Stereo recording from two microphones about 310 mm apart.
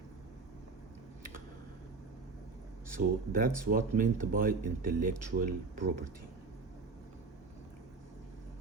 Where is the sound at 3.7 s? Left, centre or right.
Right.